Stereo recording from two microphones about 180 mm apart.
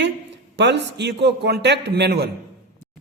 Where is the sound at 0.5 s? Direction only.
75° right (ahead or behind).